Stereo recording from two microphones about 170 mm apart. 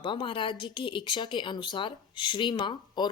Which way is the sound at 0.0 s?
30° left (ahead or behind).